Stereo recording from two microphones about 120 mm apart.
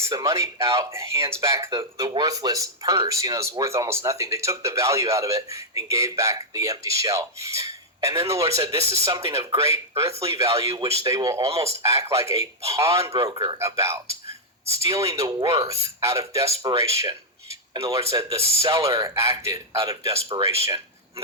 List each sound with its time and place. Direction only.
0.0 s speech: 25° right (ahead or behind)
13.2 s speech: 40° right (ahead or behind)
13.6 s speech: 25° right (ahead or behind)